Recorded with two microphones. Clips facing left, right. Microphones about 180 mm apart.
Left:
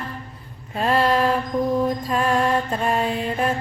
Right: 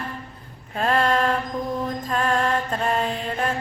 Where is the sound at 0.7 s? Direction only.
5° left (ahead or behind).